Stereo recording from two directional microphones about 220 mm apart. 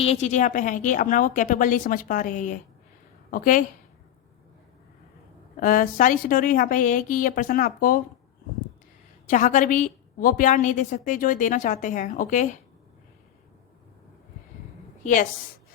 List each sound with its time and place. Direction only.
0.0 s a woman's voice: 30° left (ahead or behind)
5.5 s a woman's voice: 40° left (ahead or behind)
9.2 s a woman's voice: 35° left (ahead or behind)
15.0 s a woman's voice: 35° left (ahead or behind)